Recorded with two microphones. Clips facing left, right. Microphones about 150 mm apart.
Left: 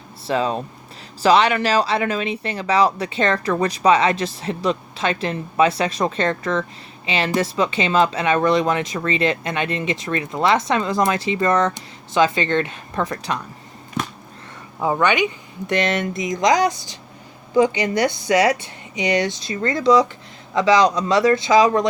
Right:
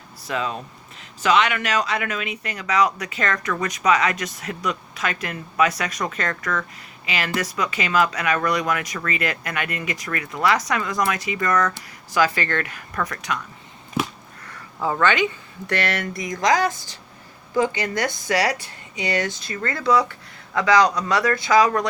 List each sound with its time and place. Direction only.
0.3 s speech: 30° left (ahead or behind)
14.8 s speech: 20° left (ahead or behind)